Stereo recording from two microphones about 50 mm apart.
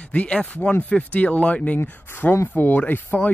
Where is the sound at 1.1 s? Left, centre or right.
Left.